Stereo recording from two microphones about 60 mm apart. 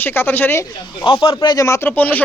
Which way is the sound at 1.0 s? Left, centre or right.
Left.